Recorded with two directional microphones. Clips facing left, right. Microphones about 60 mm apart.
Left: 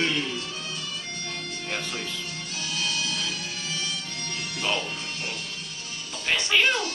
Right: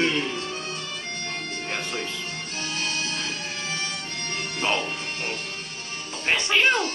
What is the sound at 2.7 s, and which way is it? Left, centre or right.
Music, right.